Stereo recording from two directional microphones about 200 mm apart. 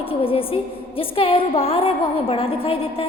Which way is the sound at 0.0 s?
30° left (ahead or behind).